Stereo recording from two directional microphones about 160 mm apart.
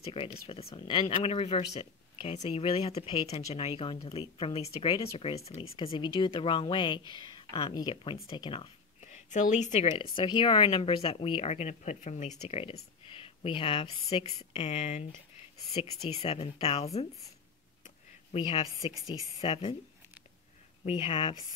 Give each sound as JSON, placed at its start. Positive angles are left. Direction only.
{"t": 0.0, "sound": "speech", "side_deg": 35}
{"t": 9.0, "sound": "speech", "side_deg": 50}
{"t": 9.9, "sound": "speech", "side_deg": 30}
{"t": 13.0, "sound": "a sound", "side_deg": 35}
{"t": 14.1, "sound": "speech", "side_deg": 35}
{"t": 18.3, "sound": "speech", "side_deg": 35}
{"t": 18.9, "sound": "a woman's voice", "side_deg": -20}
{"t": 19.4, "sound": "speech", "side_deg": 35}
{"t": 20.8, "sound": "speech", "side_deg": 35}